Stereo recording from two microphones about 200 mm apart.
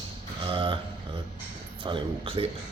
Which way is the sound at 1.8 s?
25° right (ahead or behind).